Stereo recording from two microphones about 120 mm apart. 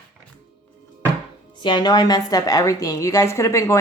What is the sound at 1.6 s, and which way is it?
A woman's voice, 40° left (ahead or behind).